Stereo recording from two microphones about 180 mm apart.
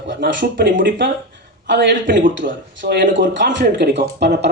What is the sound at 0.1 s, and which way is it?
A man's voice, 75° right (ahead or behind).